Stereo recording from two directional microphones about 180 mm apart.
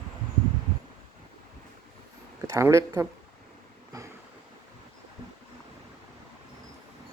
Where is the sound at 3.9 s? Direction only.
20° right (ahead or behind).